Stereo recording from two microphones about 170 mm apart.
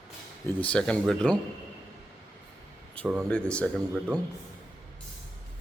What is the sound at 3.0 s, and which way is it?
Speech, 5° left (ahead or behind).